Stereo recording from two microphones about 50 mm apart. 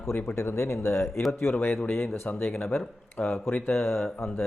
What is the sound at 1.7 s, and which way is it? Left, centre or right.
Speech, left.